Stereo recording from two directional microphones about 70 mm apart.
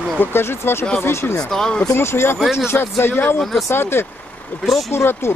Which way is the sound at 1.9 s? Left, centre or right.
Left.